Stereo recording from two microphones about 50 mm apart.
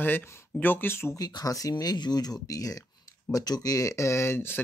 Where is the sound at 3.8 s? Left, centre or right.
Left.